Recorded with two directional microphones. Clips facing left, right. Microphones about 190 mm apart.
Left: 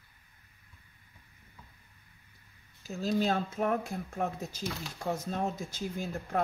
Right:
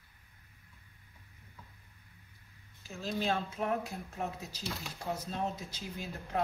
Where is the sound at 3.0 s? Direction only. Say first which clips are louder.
Left 5 dB; 40° left (ahead or behind).